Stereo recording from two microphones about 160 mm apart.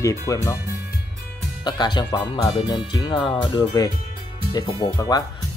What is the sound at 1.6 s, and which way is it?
Speech, 25° left (ahead or behind).